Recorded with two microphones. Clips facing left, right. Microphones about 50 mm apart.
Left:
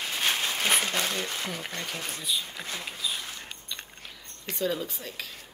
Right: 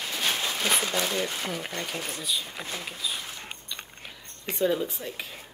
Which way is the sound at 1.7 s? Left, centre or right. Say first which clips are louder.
Right 2 dB; right.